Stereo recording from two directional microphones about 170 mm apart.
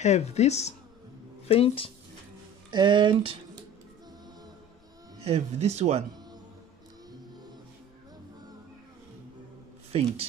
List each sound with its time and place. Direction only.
0.0 s speech: 40° left (ahead or behind)
2.7 s speech: 25° right (ahead or behind)
5.2 s speech: 40° right (ahead or behind)